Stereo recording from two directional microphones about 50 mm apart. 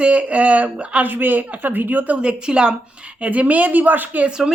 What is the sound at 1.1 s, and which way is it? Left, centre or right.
Speech, right.